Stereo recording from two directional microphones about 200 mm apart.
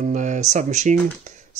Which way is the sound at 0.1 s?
35° right (ahead or behind).